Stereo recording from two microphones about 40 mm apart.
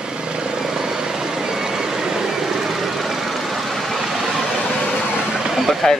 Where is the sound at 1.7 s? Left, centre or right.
Centre.